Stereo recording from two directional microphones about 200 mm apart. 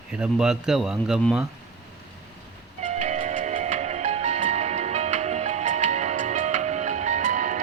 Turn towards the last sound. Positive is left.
turn(degrees=-40)  # may be behind; listen again after turning